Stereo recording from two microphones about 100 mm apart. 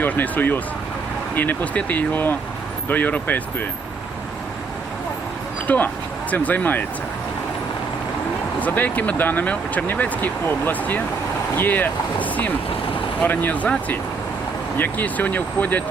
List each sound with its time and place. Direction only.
0.0 s speech: 20° left (ahead or behind)
5.6 s speech: 15° left (ahead or behind)
8.6 s speech: 15° left (ahead or behind)